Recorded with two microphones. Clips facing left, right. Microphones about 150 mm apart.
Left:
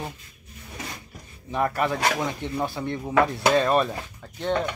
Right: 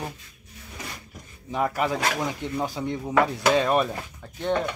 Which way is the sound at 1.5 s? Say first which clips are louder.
Left 1 dB; 15° right (ahead or behind).